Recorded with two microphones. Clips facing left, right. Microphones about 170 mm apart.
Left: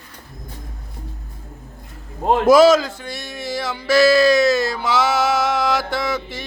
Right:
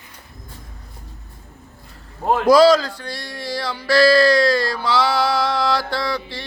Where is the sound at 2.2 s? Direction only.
20° left (ahead or behind).